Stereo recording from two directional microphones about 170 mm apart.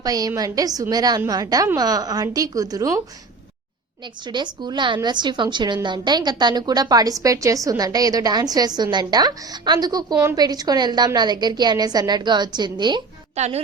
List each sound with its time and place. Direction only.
0.0 s a woman's voice: 20° right (ahead or behind)
4.3 s a woman's voice: 25° right (ahead or behind)
13.3 s a woman's voice: 40° right (ahead or behind)